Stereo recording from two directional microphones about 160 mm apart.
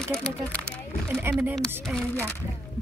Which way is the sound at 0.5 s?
10° left (ahead or behind).